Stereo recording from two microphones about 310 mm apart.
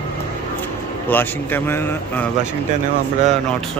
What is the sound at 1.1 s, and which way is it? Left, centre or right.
Speech, centre.